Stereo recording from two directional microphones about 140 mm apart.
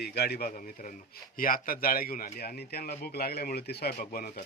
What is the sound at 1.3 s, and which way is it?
Speech, 90° left.